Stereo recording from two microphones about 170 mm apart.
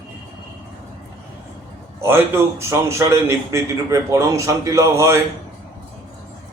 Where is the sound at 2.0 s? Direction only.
15° right (ahead or behind).